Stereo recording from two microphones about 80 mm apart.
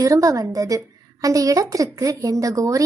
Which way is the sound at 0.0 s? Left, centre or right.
Right.